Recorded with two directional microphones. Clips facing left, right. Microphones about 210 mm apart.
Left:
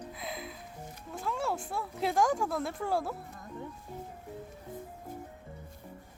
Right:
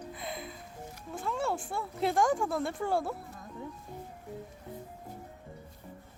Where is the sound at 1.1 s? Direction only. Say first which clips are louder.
Right 1 dB; centre (ahead or behind).